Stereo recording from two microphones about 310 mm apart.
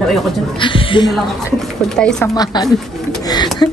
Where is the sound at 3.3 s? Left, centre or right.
Centre.